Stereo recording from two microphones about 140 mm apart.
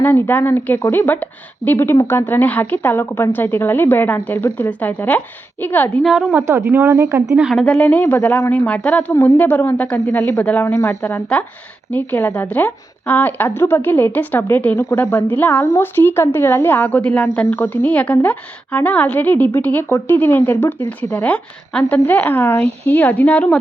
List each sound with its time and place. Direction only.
0.0 s a woman's voice: 15° left (ahead or behind)
6.0 s a woman's voice: 5° right (ahead or behind)
6.4 s speech: 20° right (ahead or behind)
6.8 s a woman's voice: 10° right (ahead or behind); by 10.0 s 10° left (ahead or behind)
10.1 s a woman's voice: 20° left (ahead or behind)